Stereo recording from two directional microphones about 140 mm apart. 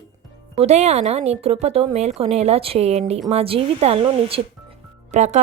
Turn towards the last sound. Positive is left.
turn(degrees=-55)  # may be behind; listen again after turning